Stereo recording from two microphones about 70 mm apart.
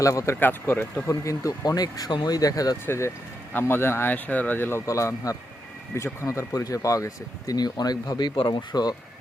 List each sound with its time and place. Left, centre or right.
0.0 s speech: left
0.3 s speech: left
1.0 s speech: left
2.8 s speech: left
4.9 s speech: left